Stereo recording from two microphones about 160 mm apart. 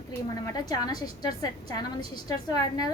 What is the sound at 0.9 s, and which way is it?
A woman's voice, 25° left (ahead or behind).